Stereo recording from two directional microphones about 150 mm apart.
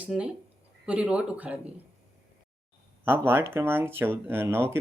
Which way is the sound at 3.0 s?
15° right (ahead or behind).